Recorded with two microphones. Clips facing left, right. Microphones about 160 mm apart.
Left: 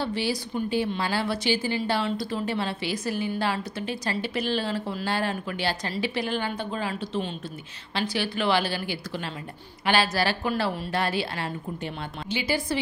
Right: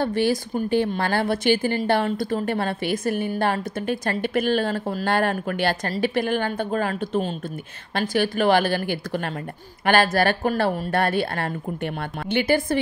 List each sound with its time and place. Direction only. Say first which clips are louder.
0.0 s a woman's voice: right 6 dB; 50° right (ahead or behind)